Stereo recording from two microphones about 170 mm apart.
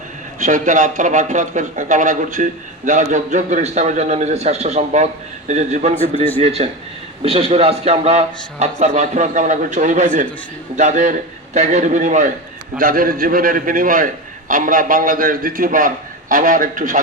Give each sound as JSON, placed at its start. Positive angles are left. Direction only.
{"t": 0.3, "sound": "a man's voice", "side_deg": -45}